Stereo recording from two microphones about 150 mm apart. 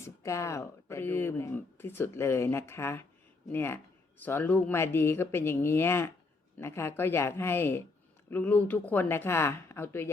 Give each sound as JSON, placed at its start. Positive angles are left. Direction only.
{"t": 0.0, "sound": "speech", "side_deg": 20}